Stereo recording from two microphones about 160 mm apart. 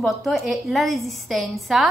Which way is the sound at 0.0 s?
Centre (ahead or behind).